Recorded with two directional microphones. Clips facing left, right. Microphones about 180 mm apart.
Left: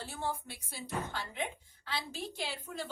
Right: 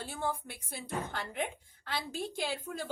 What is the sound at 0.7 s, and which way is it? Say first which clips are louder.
A woman's voice: right 1 dB; 50° right (ahead or behind).